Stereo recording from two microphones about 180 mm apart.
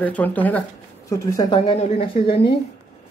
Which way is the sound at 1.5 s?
30° left (ahead or behind).